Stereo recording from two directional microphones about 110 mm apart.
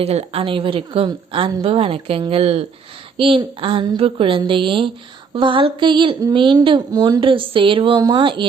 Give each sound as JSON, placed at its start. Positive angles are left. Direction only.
{"t": 0.0, "sound": "speech", "side_deg": -70}
{"t": 3.2, "sound": "speech", "side_deg": -55}
{"t": 7.2, "sound": "speech", "side_deg": -50}